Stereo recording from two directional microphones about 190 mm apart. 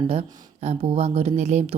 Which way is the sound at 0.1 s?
35° right (ahead or behind).